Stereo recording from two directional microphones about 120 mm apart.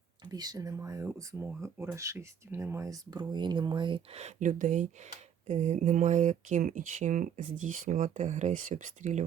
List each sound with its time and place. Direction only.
0.3 s speech: 35° right (ahead or behind)
4.1 s speech: 75° right (ahead or behind)
5.5 s speech: 80° right